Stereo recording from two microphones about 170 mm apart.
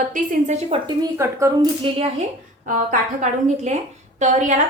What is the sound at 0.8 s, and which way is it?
Speech, 20° right (ahead or behind).